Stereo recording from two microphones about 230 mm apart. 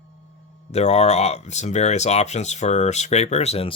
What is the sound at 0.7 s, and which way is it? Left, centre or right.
Speech, left.